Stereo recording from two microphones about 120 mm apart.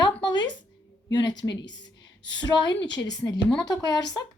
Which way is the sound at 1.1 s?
35° left (ahead or behind).